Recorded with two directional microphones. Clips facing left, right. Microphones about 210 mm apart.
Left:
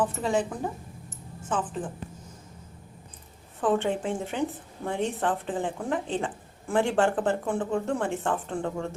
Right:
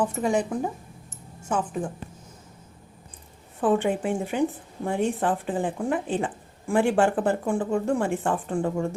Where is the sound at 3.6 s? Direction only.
10° right (ahead or behind).